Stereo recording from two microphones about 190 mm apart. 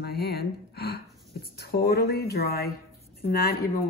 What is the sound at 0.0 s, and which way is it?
Speech, 55° left (ahead or behind).